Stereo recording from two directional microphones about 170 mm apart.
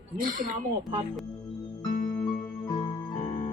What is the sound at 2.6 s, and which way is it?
Music, 25° left (ahead or behind).